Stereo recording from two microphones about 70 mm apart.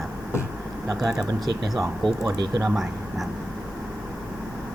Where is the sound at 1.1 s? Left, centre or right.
Right.